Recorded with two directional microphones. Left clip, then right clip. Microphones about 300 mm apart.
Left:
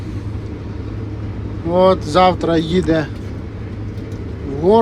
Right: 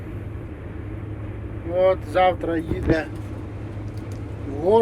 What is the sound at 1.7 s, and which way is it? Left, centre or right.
Speech, centre.